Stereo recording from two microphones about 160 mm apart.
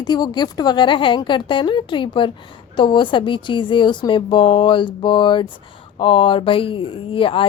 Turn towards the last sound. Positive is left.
turn(degrees=35)  # may be behind; listen again after turning